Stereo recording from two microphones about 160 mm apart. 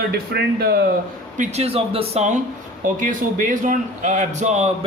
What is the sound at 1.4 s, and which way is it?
A man's voice, 40° right (ahead or behind).